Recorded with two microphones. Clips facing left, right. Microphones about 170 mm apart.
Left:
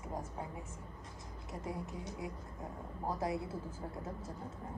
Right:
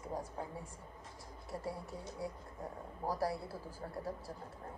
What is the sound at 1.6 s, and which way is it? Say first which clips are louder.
Speech: left 3 dB; 20° left (ahead or behind).